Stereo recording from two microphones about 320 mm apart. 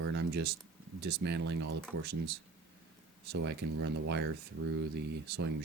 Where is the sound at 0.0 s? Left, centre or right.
Right.